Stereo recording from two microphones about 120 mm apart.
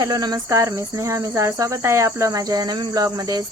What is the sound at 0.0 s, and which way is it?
Speech, 35° right (ahead or behind).